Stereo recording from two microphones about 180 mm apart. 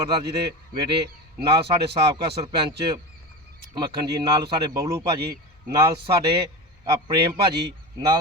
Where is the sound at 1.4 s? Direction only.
30° right (ahead or behind).